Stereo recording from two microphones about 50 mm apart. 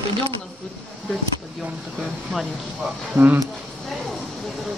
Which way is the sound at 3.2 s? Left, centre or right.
Right.